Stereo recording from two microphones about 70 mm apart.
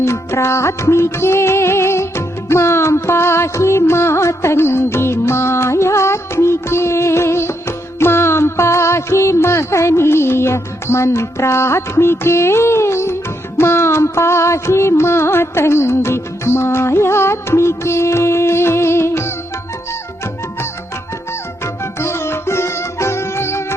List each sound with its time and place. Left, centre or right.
0.0 s music: left
21.6 s music: left